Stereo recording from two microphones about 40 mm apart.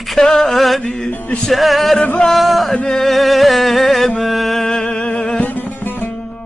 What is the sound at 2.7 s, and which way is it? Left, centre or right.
Mantra, centre.